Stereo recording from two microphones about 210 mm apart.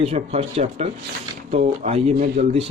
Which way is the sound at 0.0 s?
30° right (ahead or behind).